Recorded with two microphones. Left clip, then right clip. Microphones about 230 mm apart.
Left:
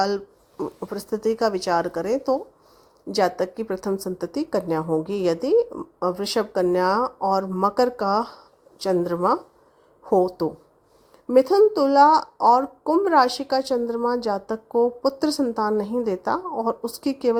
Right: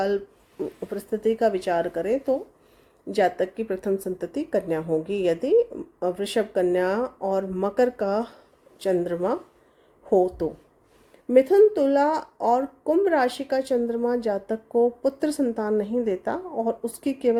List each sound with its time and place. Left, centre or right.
0.8 s speech: centre
3.2 s speech: centre